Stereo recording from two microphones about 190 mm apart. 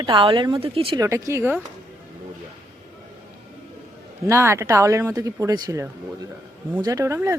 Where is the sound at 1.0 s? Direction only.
15° right (ahead or behind).